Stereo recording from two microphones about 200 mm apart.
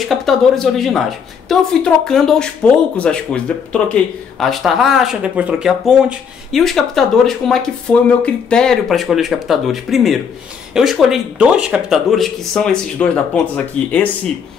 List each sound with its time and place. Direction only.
0.0 s speech: centre (ahead or behind)